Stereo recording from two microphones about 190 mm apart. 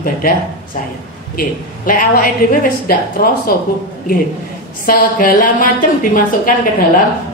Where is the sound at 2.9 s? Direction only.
50° left (ahead or behind).